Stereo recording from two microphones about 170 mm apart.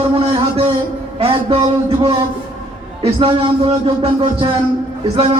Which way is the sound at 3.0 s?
30° right (ahead or behind).